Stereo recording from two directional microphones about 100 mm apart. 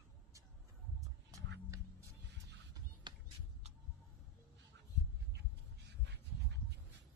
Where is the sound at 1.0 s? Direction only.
35° right (ahead or behind).